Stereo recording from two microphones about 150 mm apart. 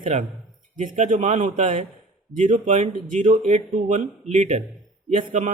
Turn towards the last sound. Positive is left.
turn(degrees=-55)  # may be behind; listen again after turning